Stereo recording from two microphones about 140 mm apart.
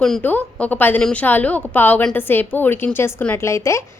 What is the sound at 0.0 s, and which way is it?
A woman's voice, 10° left (ahead or behind).